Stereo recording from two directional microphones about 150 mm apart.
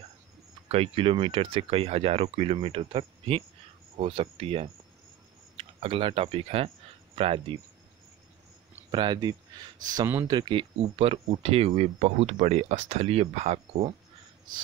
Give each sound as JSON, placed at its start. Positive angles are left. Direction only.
{"t": 0.7, "sound": "speech", "side_deg": -40}
{"t": 8.9, "sound": "speech", "side_deg": -30}